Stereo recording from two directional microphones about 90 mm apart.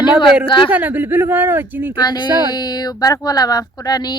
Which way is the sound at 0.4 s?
65° left (ahead or behind).